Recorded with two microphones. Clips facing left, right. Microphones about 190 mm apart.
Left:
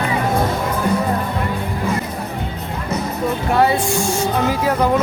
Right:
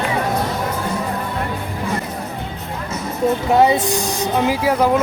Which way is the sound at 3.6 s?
20° right (ahead or behind).